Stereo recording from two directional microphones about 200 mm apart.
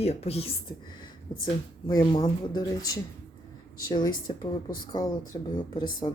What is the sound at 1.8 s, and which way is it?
Speech, 25° left (ahead or behind).